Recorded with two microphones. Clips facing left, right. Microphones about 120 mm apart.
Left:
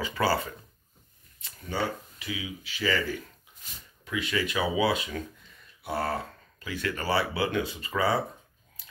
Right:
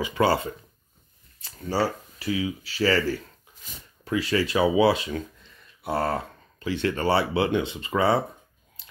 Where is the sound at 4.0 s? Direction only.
35° right (ahead or behind).